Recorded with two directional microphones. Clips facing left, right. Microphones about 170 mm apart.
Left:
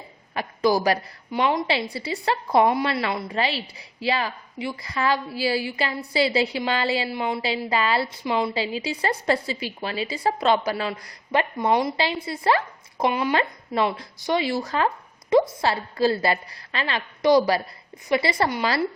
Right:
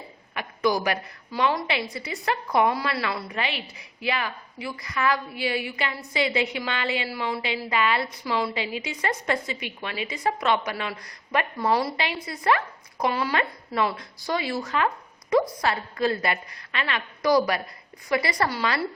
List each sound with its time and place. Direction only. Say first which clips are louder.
0.3 s a woman's voice: left 3 dB; 35° left (ahead or behind)